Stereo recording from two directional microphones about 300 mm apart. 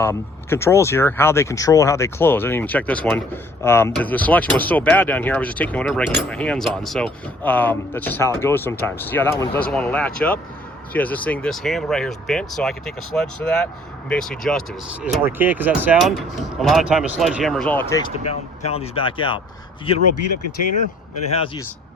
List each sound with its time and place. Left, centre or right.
0.0 s speech: centre
18.3 s speech: left
21.3 s speech: centre